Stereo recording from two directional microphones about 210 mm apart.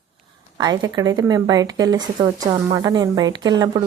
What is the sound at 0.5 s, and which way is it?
Speech, 20° right (ahead or behind).